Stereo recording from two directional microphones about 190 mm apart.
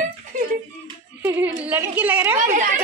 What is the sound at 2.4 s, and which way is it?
Speech, 45° right (ahead or behind).